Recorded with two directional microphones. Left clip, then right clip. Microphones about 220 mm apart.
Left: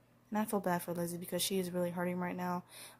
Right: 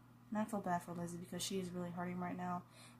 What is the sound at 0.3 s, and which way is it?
Speech, 45° left (ahead or behind).